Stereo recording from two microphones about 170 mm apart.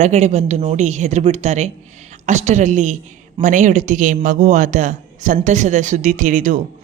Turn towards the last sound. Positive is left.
turn(degrees=-50)  # may be behind; listen again after turning